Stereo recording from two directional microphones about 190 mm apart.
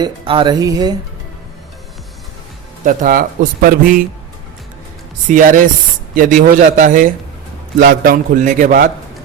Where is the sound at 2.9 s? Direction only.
45° right (ahead or behind).